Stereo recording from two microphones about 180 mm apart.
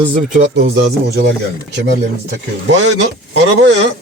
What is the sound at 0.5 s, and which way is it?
Speech, 75° right (ahead or behind).